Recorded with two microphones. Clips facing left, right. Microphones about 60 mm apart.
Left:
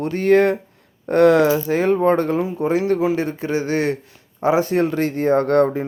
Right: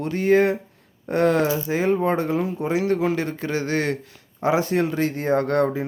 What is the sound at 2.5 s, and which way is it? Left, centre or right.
Speech, left.